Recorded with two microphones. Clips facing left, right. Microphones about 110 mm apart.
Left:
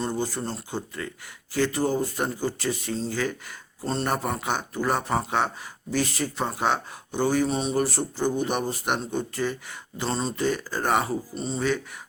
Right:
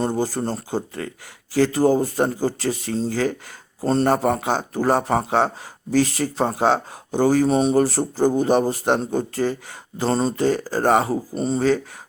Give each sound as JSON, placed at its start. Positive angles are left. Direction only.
{"t": 0.1, "sound": "speech", "side_deg": -35}
{"t": 3.8, "sound": "speech", "side_deg": -45}
{"t": 4.1, "sound": "speech", "side_deg": -35}
{"t": 11.1, "sound": "speech", "side_deg": -45}